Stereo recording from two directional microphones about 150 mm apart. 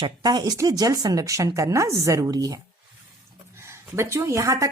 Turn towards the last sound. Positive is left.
turn(degrees=-20)  # may be behind; listen again after turning